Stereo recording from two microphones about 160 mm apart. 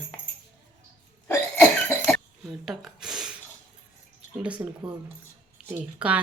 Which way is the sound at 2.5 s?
5° right (ahead or behind).